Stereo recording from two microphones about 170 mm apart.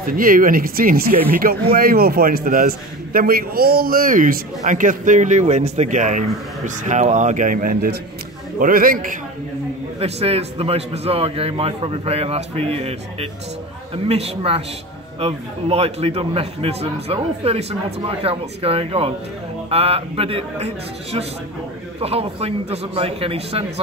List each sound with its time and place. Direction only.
0.0 s a man's voice: 55° right (ahead or behind)
9.9 s a man's voice: 35° right (ahead or behind)